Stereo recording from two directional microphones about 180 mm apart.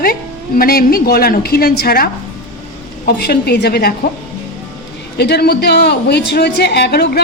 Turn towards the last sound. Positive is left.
turn(degrees=60)  # may be behind; listen again after turning